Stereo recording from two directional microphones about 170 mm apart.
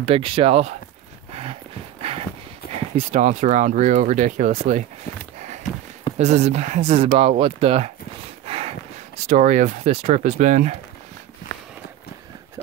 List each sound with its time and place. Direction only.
0.0 s speech: 35° right (ahead or behind)
1.3 s clip-clop: 35° right (ahead or behind)
2.1 s horse: 35° right (ahead or behind)
3.0 s speech: 40° right (ahead or behind)
6.1 s speech: 40° right (ahead or behind)
8.5 s a sound: 35° right (ahead or behind)
9.3 s speech: 45° right (ahead or behind)